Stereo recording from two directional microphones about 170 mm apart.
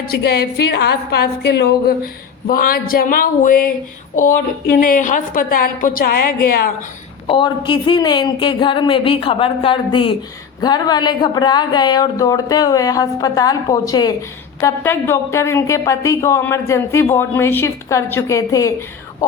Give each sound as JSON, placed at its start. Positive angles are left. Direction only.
{"t": 0.1, "sound": "a woman's voice", "side_deg": 70}
{"t": 7.3, "sound": "a woman's voice", "side_deg": 30}